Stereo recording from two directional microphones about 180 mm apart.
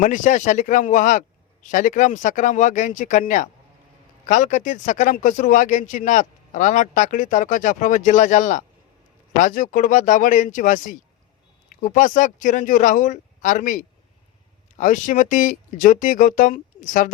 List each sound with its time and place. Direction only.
0.0 s speech: 45° left (ahead or behind)